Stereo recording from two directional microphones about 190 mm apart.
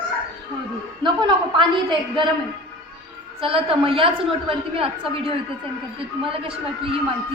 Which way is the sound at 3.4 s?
30° right (ahead or behind).